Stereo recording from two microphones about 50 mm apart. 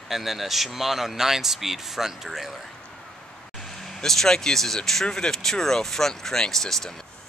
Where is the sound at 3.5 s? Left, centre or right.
Centre.